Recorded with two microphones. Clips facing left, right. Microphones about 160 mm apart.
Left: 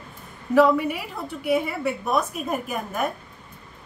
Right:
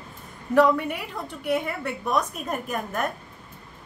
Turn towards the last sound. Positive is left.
turn(degrees=5)  # may be behind; listen again after turning